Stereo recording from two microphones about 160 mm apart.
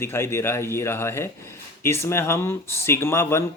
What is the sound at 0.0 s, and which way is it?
Speech, 15° left (ahead or behind).